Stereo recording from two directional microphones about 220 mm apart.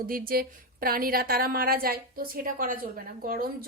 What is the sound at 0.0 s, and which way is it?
A woman's voice, 40° right (ahead or behind).